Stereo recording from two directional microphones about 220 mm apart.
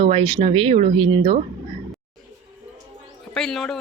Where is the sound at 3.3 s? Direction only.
Centre (ahead or behind).